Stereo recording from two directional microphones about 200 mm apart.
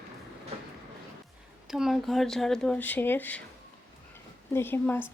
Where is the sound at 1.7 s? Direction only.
Centre (ahead or behind).